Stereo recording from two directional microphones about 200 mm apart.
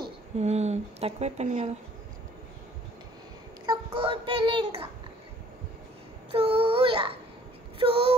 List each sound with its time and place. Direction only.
0.4 s speech: 35° right (ahead or behind)
3.6 s a sound: 25° right (ahead or behind)
6.3 s child singing: 30° right (ahead or behind)
7.8 s female singing: 30° right (ahead or behind)